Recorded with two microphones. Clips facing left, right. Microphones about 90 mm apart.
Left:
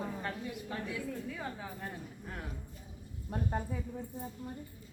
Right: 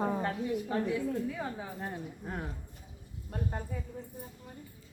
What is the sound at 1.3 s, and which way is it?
Speech, 15° right (ahead or behind).